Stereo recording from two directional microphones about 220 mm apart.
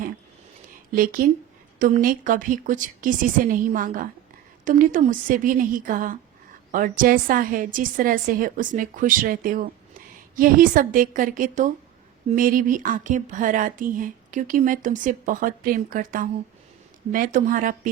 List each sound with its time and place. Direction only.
0.9 s speech: 40° right (ahead or behind)